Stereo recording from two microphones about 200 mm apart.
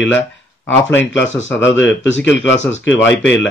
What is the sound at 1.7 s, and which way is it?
Speech, 65° left (ahead or behind).